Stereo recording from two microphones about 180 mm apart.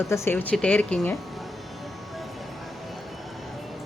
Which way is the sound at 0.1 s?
10° left (ahead or behind).